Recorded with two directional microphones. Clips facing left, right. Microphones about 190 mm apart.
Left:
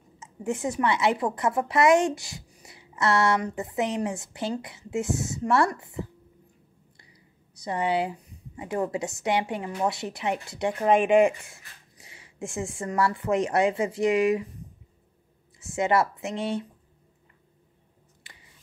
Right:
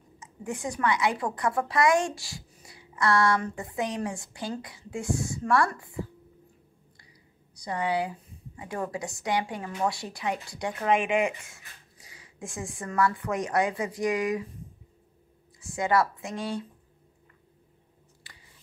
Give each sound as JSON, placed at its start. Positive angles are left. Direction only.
{"t": 0.2, "sound": "a woman's voice", "side_deg": 25}
{"t": 7.5, "sound": "a woman's voice", "side_deg": 25}
{"t": 15.6, "sound": "a woman's voice", "side_deg": 25}